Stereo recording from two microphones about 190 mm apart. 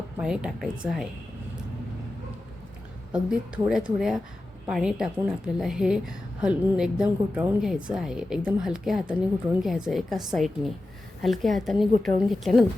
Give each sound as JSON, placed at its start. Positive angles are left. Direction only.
{"t": 0.2, "sound": "a woman's voice", "side_deg": -5}
{"t": 3.1, "sound": "a woman's voice", "side_deg": -5}